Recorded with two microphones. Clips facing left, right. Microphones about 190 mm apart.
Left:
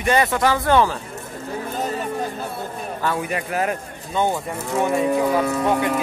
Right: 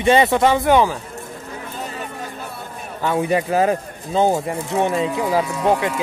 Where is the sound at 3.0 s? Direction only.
25° right (ahead or behind).